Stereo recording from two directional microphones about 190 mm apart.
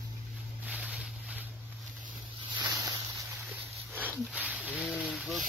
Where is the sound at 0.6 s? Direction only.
5° right (ahead or behind).